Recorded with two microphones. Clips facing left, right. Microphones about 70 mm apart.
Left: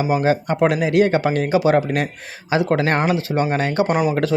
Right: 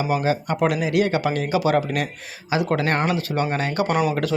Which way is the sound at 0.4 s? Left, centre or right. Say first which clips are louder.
Left 4 dB; left.